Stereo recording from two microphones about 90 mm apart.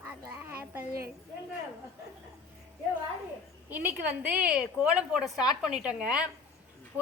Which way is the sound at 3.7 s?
20° right (ahead or behind).